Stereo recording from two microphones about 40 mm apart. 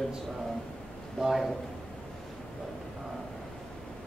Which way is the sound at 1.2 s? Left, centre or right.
Centre.